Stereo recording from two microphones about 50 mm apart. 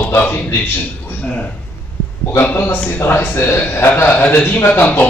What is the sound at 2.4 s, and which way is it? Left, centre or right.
A man's voice, left.